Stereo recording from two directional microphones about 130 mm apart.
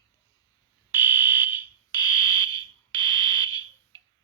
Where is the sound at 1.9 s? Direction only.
30° left (ahead or behind).